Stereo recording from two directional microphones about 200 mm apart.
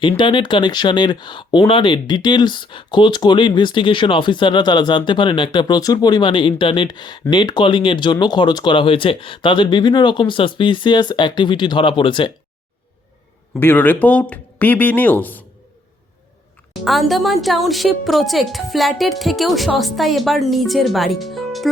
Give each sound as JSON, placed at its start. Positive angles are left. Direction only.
{"t": 0.2, "sound": "speech", "side_deg": 25}
{"t": 13.6, "sound": "speech", "side_deg": 10}
{"t": 16.8, "sound": "speech", "side_deg": 0}